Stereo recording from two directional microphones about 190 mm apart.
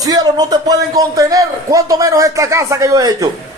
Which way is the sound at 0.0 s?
20° right (ahead or behind).